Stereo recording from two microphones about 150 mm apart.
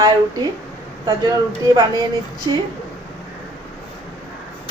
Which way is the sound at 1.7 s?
25° right (ahead or behind).